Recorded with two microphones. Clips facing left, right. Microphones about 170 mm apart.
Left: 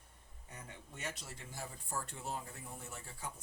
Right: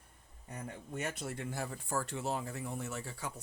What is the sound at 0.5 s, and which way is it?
Speech, 55° right (ahead or behind).